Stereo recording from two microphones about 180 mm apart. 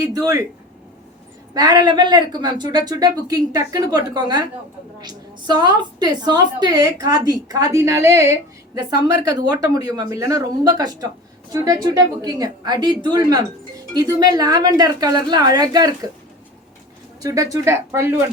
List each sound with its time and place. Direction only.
0.0 s a woman's voice: 20° right (ahead or behind)
1.5 s a woman's voice: 25° right (ahead or behind)
17.2 s speech: 20° right (ahead or behind)